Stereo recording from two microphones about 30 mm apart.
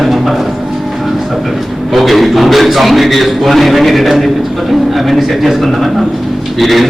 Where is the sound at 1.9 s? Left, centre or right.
Centre.